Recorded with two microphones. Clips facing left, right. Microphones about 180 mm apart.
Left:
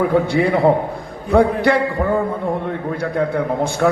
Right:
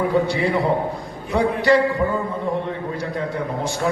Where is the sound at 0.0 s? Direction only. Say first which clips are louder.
Left 4 dB; 55° left (ahead or behind).